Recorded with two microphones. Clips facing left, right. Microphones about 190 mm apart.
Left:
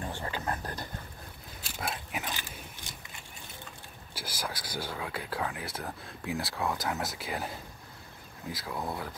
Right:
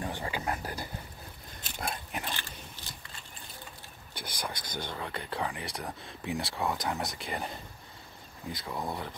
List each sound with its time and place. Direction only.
0.0 s a sound: 15° right (ahead or behind)
1.8 s pig: 5° left (ahead or behind)
4.1 s speech: 5° left (ahead or behind)